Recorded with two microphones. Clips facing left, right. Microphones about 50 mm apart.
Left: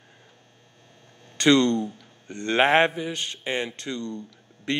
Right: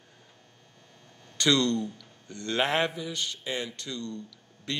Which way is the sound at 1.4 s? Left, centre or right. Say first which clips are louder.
Left 6 dB; left.